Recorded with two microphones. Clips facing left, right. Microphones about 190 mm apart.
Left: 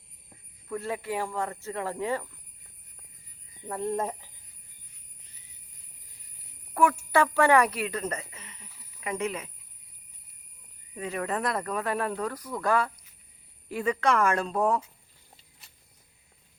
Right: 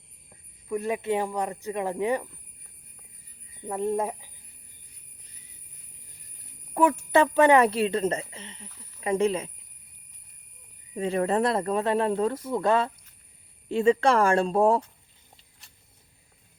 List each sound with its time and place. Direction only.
0.7 s speech: 15° right (ahead or behind)
3.7 s speech: 15° right (ahead or behind)
6.8 s jingle bell: 20° right (ahead or behind)
7.1 s speech: 20° right (ahead or behind)
10.9 s speech: 30° right (ahead or behind)